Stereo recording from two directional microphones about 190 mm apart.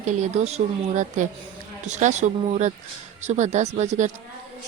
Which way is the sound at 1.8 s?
40° right (ahead or behind).